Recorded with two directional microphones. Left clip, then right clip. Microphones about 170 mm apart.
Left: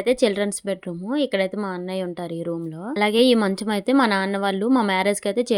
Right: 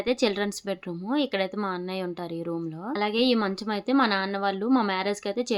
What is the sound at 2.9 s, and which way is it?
A woman's voice, 45° left (ahead or behind).